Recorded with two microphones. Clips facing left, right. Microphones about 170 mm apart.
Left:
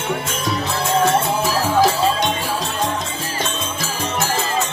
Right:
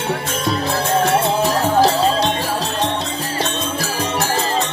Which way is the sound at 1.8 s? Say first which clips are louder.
Right 1 dB; 35° right (ahead or behind).